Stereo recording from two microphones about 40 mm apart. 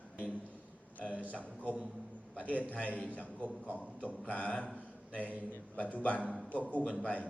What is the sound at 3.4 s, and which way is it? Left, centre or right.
Speech, right.